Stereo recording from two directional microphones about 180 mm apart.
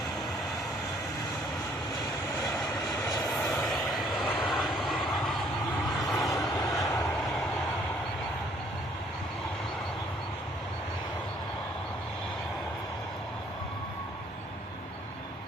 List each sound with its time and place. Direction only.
3.2 s vehicle: 5° left (ahead or behind)
6.7 s vehicle: 20° left (ahead or behind)